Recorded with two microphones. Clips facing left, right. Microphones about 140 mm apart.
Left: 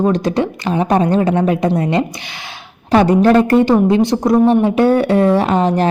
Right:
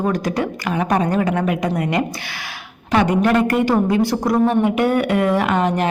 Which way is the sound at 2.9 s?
30° left (ahead or behind).